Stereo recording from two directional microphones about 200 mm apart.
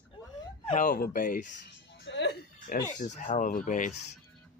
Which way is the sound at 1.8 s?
60° left (ahead or behind).